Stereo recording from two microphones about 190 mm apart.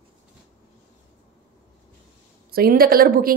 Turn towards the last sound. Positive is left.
turn(degrees=-50)  # may be behind; listen again after turning